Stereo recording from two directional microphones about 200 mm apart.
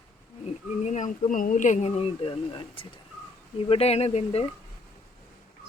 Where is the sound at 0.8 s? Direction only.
35° left (ahead or behind).